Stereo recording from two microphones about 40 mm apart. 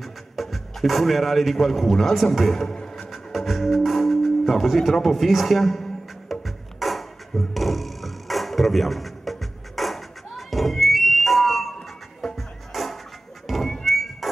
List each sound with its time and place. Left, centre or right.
0.0 s music: centre
1.9 s a man's voice: centre
3.0 s music: centre
5.0 s speech: centre
6.4 s a sound: centre
12.4 s music: centre